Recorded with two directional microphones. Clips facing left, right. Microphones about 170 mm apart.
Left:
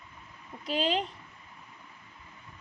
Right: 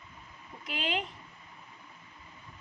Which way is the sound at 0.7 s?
35° left (ahead or behind).